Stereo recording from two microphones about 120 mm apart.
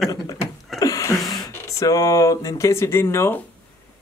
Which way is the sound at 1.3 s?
30° left (ahead or behind).